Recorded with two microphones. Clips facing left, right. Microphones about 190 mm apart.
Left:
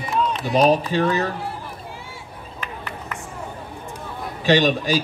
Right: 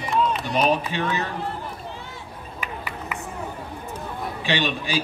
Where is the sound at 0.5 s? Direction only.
35° left (ahead or behind).